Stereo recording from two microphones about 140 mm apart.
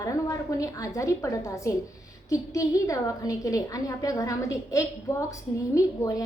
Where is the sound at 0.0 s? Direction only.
25° left (ahead or behind).